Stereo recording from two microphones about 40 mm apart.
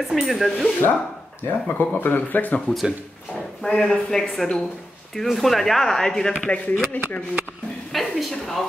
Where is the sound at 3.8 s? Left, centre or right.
Centre.